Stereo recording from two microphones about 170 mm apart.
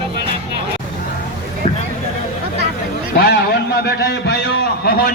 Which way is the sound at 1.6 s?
35° left (ahead or behind).